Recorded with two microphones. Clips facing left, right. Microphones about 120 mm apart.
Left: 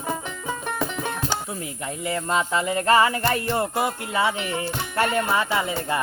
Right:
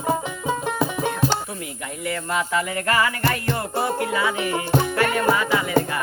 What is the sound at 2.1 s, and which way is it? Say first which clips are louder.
Music: left 1 dB; 25° left (ahead or behind).